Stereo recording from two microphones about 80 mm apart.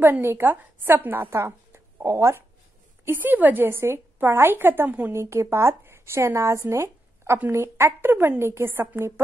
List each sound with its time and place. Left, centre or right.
0.0 s a woman's voice: right
2.0 s a woman's voice: right
3.1 s a woman's voice: right
5.1 s a woman's voice: right